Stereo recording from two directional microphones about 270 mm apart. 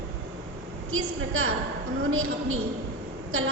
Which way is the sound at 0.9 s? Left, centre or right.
Right.